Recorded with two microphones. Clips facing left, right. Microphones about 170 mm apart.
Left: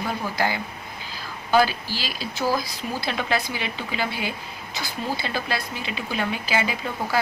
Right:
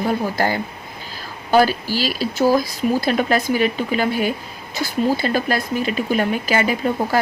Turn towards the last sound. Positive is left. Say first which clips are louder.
# right 7 dB
turn(degrees=-45)  # may be behind; listen again after turning